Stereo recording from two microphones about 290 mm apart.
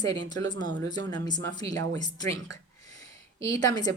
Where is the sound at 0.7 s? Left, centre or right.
Right.